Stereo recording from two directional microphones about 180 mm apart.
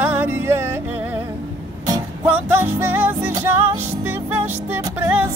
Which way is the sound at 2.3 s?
10° right (ahead or behind).